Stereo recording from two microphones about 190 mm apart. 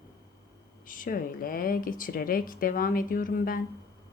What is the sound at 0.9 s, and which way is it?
A woman's voice, 45° left (ahead or behind).